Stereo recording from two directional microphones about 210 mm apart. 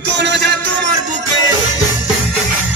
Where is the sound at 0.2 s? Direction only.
55° right (ahead or behind).